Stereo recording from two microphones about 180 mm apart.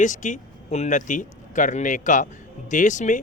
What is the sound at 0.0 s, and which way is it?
Speech, 45° left (ahead or behind).